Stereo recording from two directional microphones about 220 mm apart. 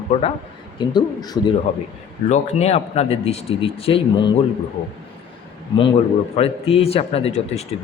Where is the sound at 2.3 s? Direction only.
30° left (ahead or behind).